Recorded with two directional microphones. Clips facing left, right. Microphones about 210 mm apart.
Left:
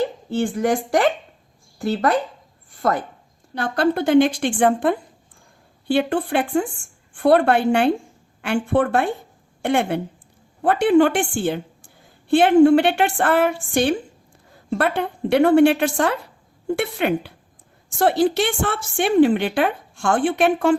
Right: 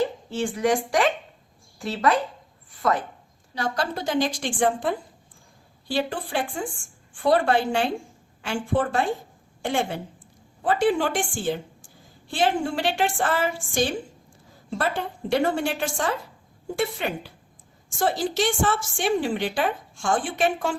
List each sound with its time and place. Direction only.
0.0 s a woman's voice: 60° left (ahead or behind)
3.5 s a woman's voice: 55° left (ahead or behind)